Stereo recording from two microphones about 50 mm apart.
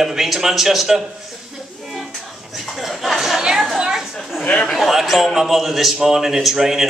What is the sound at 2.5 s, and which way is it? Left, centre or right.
Chuckle, centre.